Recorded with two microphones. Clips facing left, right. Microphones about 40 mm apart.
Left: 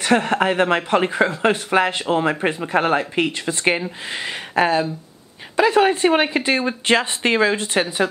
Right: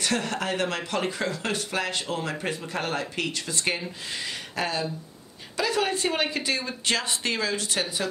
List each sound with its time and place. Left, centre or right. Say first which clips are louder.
0.0 s speech: left 10 dB; left